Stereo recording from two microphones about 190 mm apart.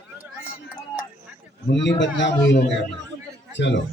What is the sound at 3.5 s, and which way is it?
Speech, 70° left (ahead or behind).